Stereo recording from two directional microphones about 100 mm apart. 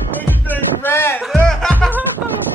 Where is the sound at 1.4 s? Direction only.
5° left (ahead or behind).